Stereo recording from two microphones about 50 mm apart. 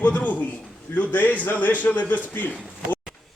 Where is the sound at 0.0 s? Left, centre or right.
Left.